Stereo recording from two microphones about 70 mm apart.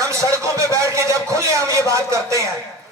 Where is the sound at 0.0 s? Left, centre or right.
Right.